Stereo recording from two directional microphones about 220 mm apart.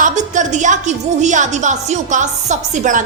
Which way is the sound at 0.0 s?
35° right (ahead or behind).